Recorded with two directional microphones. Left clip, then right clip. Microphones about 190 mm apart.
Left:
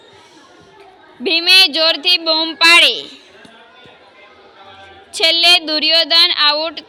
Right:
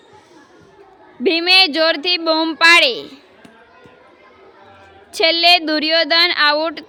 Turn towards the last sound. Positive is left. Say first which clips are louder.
# left 1 dB
turn(degrees=-40)  # may be behind; listen again after turning